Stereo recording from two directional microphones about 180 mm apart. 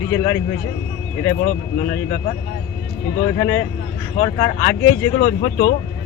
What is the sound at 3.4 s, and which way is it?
Speech, 15° left (ahead or behind).